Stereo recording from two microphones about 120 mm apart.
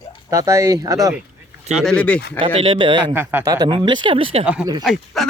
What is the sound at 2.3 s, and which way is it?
Speech, 45° right (ahead or behind).